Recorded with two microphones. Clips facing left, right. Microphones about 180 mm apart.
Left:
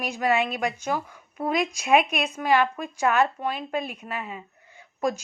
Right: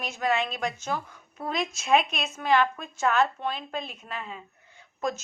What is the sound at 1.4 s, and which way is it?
A woman's voice, centre (ahead or behind).